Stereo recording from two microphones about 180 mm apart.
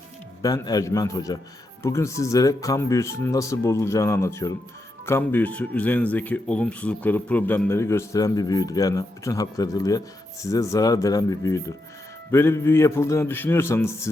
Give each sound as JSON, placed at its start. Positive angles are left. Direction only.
{"t": 0.4, "sound": "speech", "side_deg": 20}